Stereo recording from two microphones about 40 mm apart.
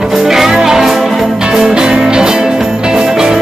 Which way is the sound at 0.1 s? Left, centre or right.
Centre.